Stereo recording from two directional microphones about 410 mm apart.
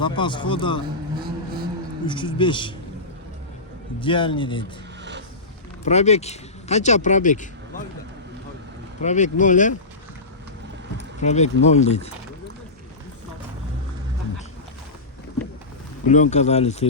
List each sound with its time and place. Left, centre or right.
0.0 s speech: centre
2.0 s speech: centre
4.0 s speech: centre
5.8 s speech: centre
9.0 s speech: centre
10.9 s speech: centre
16.0 s speech: centre